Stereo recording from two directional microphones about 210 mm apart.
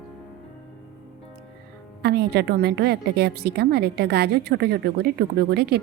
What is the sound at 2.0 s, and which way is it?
A woman's voice, 50° right (ahead or behind).